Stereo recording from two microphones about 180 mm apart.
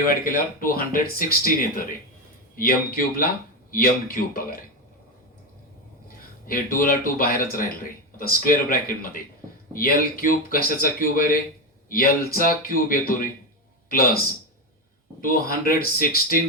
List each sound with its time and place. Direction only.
0.1 s speech: 50° left (ahead or behind)
6.4 s speech: 50° left (ahead or behind)